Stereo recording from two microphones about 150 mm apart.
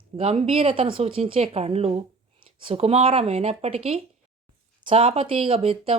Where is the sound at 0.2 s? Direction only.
40° right (ahead or behind).